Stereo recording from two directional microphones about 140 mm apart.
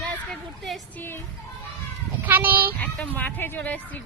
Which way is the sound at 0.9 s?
15° left (ahead or behind).